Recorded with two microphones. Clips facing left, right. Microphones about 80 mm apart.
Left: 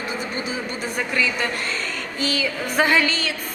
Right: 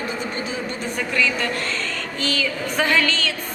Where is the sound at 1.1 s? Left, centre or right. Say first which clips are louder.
Right 2 dB; centre.